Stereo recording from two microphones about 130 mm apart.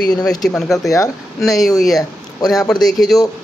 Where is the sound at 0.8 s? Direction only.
25° left (ahead or behind).